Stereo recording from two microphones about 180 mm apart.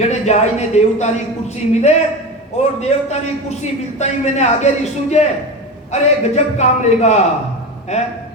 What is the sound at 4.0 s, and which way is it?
A man's voice, 40° left (ahead or behind).